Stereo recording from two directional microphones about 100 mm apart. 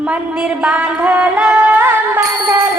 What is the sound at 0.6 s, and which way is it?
Music, 15° right (ahead or behind).